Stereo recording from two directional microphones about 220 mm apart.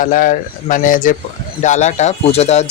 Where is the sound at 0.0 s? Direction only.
40° left (ahead or behind).